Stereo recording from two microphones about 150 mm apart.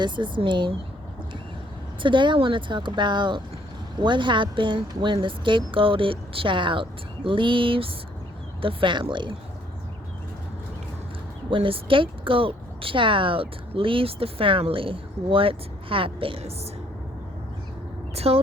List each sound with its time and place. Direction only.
0.0 s speech: 30° right (ahead or behind)
2.0 s speech: 35° right (ahead or behind)
11.5 s speech: 35° right (ahead or behind)
18.1 s speech: 45° right (ahead or behind)